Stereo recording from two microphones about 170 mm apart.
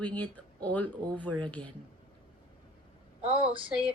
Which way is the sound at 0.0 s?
10° left (ahead or behind).